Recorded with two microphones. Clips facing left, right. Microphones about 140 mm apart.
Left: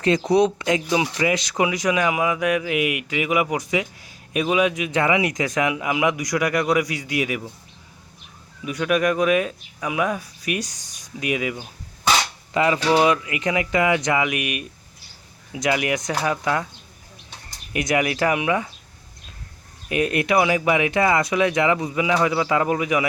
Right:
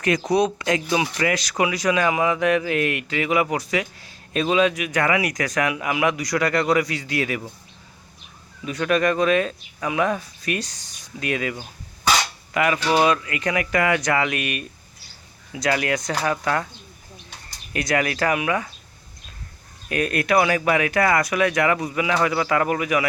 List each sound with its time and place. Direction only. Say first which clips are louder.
0.6 s speech: left 1 dB; 20° left (ahead or behind)
8.6 s speech: even; 10° left (ahead or behind)
12.5 s speech: left 1 dB; 25° left (ahead or behind)
17.7 s speech: left 1 dB; 20° left (ahead or behind)
19.9 s speech: left 1 dB; 20° left (ahead or behind)